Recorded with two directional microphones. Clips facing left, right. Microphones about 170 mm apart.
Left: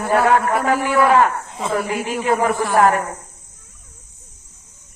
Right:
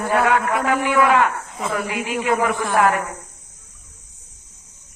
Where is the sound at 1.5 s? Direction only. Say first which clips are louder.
Left 3 dB; 25° left (ahead or behind).